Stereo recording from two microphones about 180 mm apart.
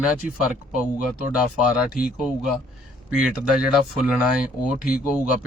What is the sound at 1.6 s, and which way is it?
Speech, 5° right (ahead or behind).